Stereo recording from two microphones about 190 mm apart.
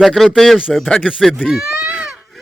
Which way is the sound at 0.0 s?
Centre (ahead or behind).